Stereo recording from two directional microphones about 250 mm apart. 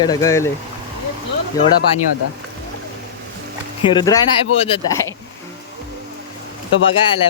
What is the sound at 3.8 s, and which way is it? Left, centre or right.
Speech, centre.